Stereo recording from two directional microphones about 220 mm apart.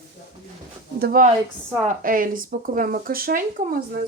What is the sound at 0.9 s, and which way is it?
Speech, 45° right (ahead or behind).